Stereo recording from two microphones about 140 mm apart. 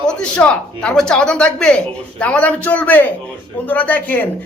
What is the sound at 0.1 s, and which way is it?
Speech, 5° left (ahead or behind).